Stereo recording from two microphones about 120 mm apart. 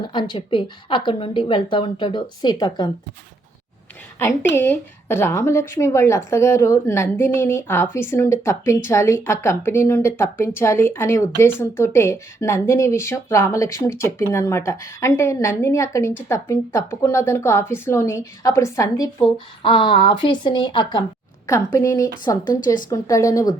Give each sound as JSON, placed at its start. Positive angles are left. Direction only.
{"t": 0.1, "sound": "a woman's voice", "side_deg": 40}
{"t": 4.2, "sound": "a woman's voice", "side_deg": 20}
{"t": 19.6, "sound": "speech", "side_deg": 45}
{"t": 21.4, "sound": "a woman's voice", "side_deg": 25}
{"t": 22.2, "sound": "a woman's voice", "side_deg": 35}